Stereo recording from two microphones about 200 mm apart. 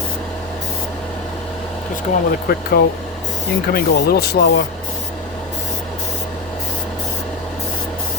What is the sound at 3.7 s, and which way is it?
Speech, 55° left (ahead or behind).